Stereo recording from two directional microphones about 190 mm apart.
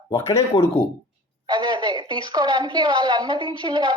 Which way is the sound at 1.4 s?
25° right (ahead or behind).